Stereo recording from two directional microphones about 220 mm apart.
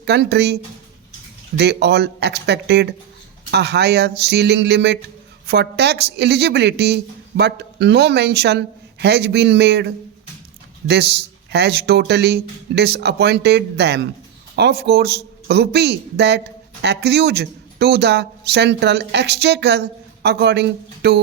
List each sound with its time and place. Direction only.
0.0 s a woman's voice: 50° right (ahead or behind)